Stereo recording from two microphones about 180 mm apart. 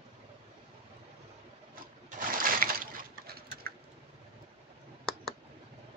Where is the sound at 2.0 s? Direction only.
50° right (ahead or behind).